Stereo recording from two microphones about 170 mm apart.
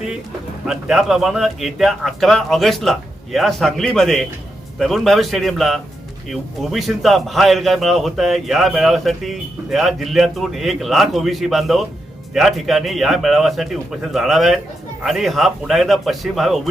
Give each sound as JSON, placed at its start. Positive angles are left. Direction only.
{"t": 0.7, "sound": "a man's voice", "side_deg": 0}